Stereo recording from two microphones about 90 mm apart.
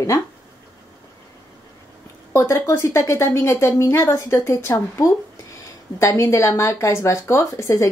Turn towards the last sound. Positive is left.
turn(degrees=35)  # may be behind; listen again after turning